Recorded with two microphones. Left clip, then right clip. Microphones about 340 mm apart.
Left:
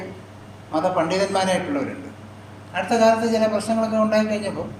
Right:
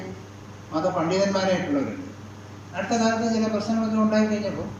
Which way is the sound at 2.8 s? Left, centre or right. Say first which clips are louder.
Left 7 dB; left.